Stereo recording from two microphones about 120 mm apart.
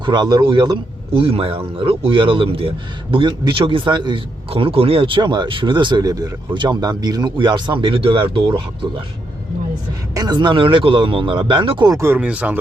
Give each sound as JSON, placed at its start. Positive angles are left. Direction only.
{"t": 0.0, "sound": "a man's voice", "side_deg": -40}
{"t": 1.2, "sound": "a man's voice", "side_deg": -50}
{"t": 10.2, "sound": "a man's voice", "side_deg": -35}
{"t": 11.9, "sound": "speech", "side_deg": -25}
{"t": 12.1, "sound": "speech", "side_deg": -10}